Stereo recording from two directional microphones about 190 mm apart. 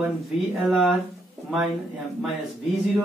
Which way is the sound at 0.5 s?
Centre (ahead or behind).